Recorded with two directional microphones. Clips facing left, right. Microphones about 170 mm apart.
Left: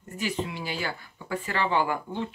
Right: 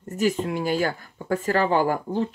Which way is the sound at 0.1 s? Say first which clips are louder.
Right 8 dB; 45° right (ahead or behind).